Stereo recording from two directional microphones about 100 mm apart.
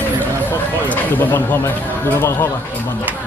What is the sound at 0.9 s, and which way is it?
Speech, 20° left (ahead or behind).